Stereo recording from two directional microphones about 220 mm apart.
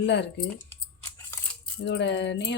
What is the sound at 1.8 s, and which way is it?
Speech, 55° left (ahead or behind).